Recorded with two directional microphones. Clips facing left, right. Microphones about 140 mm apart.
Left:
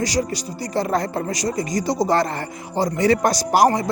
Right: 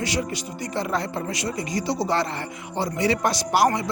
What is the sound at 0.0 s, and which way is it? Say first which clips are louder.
Speech: left 4 dB; 40° left (ahead or behind).